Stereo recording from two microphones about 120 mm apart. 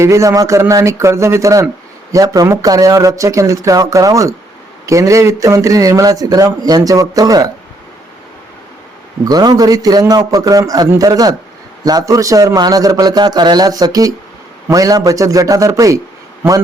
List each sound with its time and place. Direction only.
0.0 s a man's voice: 25° right (ahead or behind)
9.2 s a man's voice: 35° right (ahead or behind)